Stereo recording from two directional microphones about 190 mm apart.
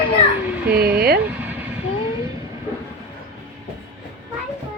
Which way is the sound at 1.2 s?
10° right (ahead or behind).